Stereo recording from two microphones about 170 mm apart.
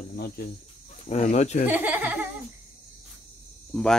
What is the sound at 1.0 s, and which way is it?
Speech, 40° left (ahead or behind).